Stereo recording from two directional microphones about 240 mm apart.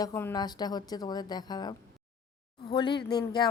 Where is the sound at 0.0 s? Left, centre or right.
Centre.